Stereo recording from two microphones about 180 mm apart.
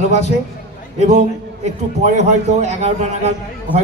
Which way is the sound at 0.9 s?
40° right (ahead or behind).